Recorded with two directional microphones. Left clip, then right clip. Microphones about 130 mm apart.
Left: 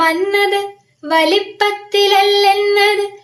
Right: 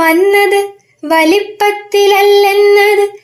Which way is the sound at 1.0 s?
50° right (ahead or behind).